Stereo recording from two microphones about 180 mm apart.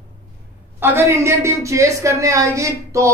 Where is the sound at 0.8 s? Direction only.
15° right (ahead or behind).